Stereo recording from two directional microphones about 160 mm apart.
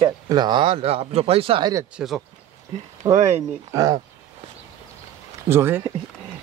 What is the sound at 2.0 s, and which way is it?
Speech, 10° right (ahead or behind).